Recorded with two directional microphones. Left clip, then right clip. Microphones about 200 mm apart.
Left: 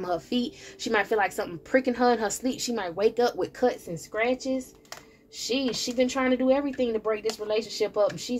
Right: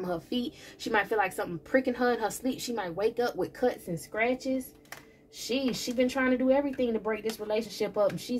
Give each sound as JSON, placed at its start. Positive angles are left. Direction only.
{"t": 0.0, "sound": "a woman's voice", "side_deg": 35}